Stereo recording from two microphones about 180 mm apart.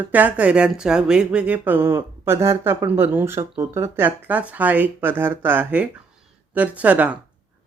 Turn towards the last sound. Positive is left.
turn(degrees=-10)  # may be behind; listen again after turning